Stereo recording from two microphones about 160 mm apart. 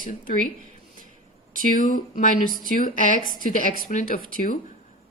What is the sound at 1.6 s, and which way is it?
Speech, 55° left (ahead or behind).